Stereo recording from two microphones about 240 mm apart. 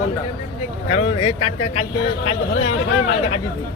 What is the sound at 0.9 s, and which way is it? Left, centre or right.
Speech, left.